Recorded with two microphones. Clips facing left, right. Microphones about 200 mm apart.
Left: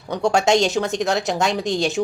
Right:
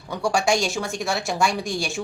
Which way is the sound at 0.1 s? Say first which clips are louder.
Left 4 dB; 20° left (ahead or behind).